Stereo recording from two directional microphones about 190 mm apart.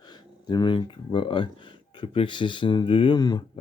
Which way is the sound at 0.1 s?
20° left (ahead or behind).